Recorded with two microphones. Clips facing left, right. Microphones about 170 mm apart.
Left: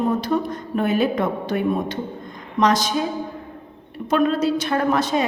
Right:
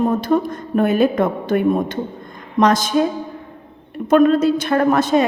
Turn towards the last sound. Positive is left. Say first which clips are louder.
# right 5 dB
turn(degrees=-50)  # may be behind; listen again after turning